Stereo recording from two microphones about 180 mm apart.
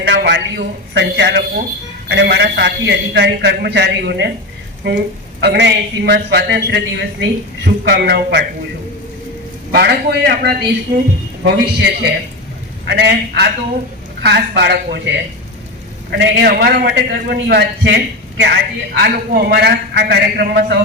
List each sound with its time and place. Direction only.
0.0 s a man's voice: 75° right (ahead or behind)
4.8 s a man's voice: 80° right
9.7 s a man's voice: 65° right (ahead or behind)
16.1 s a man's voice: 75° right (ahead or behind)
19.0 s a man's voice: 65° right (ahead or behind)